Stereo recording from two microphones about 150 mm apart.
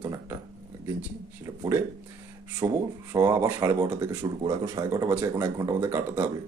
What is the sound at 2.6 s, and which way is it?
Speech, 20° right (ahead or behind).